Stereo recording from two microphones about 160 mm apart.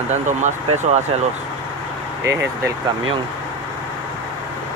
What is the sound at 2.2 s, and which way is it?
Speech, 20° right (ahead or behind).